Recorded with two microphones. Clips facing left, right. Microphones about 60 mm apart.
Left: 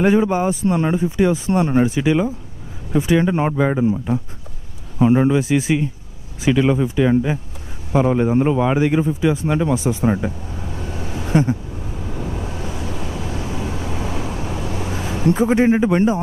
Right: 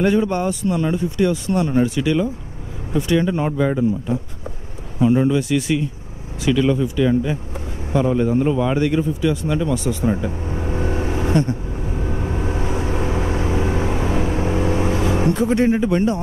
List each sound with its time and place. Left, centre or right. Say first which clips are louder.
0.0 s speech: left 2 dB; centre
0.7 s speech: left 1 dB; left
0.9 s speech: left 2 dB; centre
4.9 s speech: left 1 dB; left
10.4 s vehicle: right 6 dB; right
15.0 s a sound: left 3 dB; right
15.3 s speech: left 2 dB; centre